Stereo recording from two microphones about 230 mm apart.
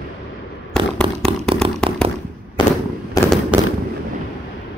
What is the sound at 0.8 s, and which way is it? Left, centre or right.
Fireworks, right.